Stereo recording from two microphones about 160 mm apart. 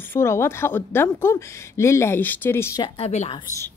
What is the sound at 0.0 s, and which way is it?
Speech, 15° left (ahead or behind).